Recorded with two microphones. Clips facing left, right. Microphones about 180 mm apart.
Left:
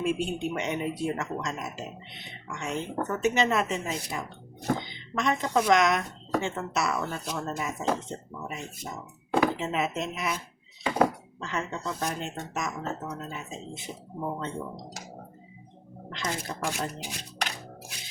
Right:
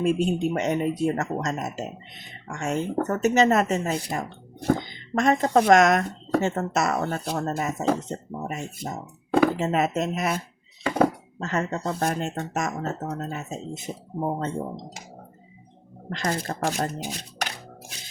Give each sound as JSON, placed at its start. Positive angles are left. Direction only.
{"t": 0.0, "sound": "speech", "side_deg": -40}
{"t": 16.0, "sound": "speech", "side_deg": -50}